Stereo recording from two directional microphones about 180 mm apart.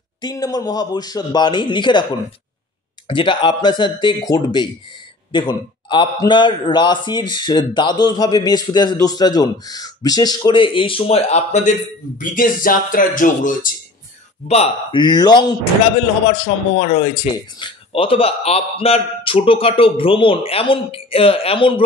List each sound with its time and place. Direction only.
0.2 s speech: 20° left (ahead or behind); by 11.7 s 40° left (ahead or behind)
12.2 s speech: 50° left (ahead or behind)
14.5 s speech: 30° left (ahead or behind)
16.8 s speech: 45° left (ahead or behind)
17.6 s a man's voice: 30° left (ahead or behind)